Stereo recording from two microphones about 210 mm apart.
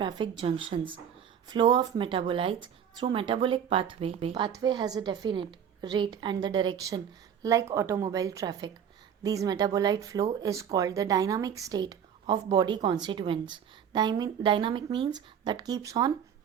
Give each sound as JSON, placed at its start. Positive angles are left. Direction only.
{"t": 0.0, "sound": "a woman's voice", "side_deg": -20}